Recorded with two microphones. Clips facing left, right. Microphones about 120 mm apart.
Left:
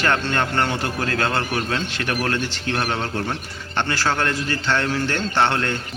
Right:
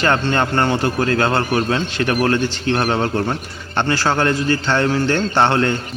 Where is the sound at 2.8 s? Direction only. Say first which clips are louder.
Right 5 dB; 40° right (ahead or behind).